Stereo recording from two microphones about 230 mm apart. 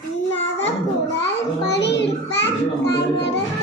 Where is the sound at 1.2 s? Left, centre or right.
Left.